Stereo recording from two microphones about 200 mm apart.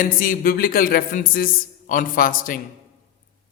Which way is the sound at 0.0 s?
45° left (ahead or behind).